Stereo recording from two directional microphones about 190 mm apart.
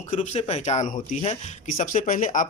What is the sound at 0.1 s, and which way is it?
Speech, 40° left (ahead or behind).